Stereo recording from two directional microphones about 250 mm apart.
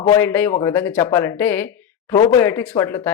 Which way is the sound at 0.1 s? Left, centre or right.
Centre.